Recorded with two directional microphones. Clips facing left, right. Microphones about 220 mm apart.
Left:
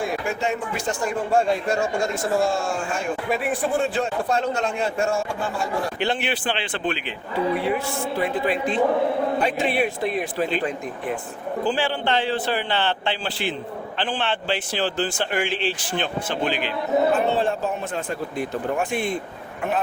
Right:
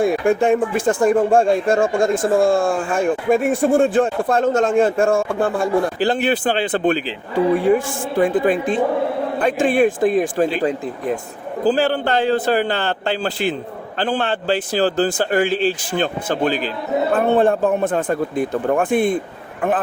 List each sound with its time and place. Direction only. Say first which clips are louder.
0.0 s speech: right 9 dB; 50° right (ahead or behind)
6.0 s a man's voice: right 7 dB; 40° right (ahead or behind)
17.1 s speech: right 6 dB; 55° right (ahead or behind)